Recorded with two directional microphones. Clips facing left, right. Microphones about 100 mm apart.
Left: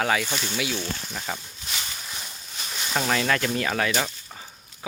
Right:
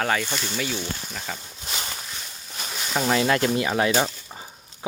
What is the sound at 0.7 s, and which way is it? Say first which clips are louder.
Speech: even; 10° right (ahead or behind).